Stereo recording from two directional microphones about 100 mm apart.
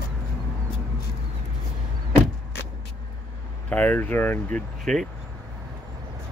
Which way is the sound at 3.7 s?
15° left (ahead or behind).